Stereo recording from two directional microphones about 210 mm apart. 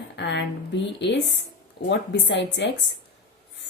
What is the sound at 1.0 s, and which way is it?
A woman's voice, 55° left (ahead or behind).